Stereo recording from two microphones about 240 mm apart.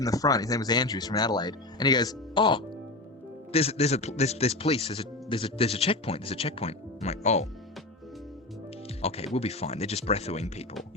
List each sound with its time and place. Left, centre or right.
0.0 s a man's voice: centre
9.0 s a man's voice: left